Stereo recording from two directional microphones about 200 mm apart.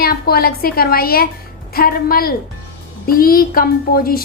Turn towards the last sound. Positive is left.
turn(degrees=50)  # may be behind; listen again after turning